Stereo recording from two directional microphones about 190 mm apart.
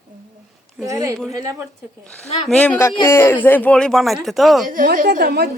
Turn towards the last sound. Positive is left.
turn(degrees=-55)  # may be behind; listen again after turning